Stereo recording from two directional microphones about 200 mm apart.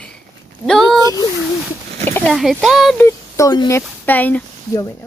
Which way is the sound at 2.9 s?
15° left (ahead or behind).